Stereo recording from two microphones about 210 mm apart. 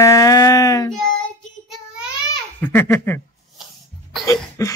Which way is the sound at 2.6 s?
10° left (ahead or behind).